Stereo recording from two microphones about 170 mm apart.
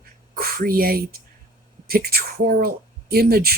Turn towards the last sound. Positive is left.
turn(degrees=-65)  # may be behind; listen again after turning